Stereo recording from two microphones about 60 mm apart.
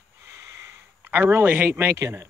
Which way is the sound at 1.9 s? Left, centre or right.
Right.